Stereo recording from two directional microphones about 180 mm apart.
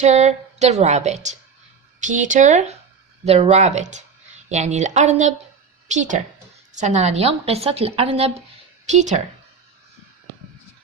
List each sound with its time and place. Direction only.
0.0 s a woman's voice: 40° right (ahead or behind)